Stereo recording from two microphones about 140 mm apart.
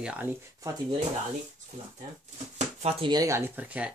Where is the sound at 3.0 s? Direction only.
25° right (ahead or behind); by 3.9 s 10° right (ahead or behind).